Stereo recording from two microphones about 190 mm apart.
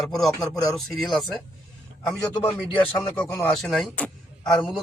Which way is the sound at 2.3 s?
25° left (ahead or behind).